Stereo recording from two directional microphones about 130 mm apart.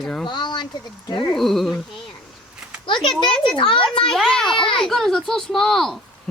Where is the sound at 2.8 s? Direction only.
40° left (ahead or behind).